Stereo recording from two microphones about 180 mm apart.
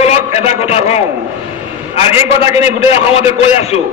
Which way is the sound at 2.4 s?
35° left (ahead or behind).